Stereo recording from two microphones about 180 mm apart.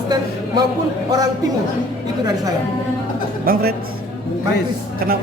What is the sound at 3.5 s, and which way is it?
Speech, 55° right (ahead or behind).